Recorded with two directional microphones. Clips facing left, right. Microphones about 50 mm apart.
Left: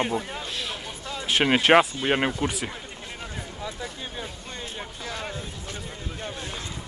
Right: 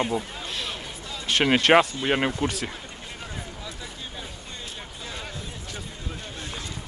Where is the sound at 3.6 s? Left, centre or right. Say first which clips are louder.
Left 4 dB; left.